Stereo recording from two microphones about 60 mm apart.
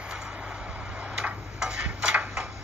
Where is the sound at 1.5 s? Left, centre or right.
Centre.